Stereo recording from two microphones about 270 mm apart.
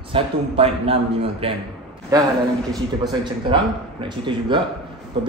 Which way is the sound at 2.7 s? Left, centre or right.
Centre.